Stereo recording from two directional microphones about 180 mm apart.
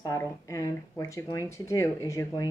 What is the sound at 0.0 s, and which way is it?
Speech, 15° left (ahead or behind).